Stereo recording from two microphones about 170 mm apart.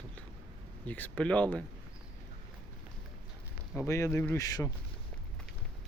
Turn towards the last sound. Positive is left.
turn(degrees=20)  # may be behind; listen again after turning